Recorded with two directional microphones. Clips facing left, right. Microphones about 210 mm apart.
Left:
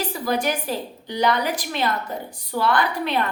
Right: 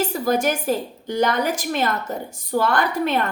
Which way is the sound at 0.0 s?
45° right (ahead or behind).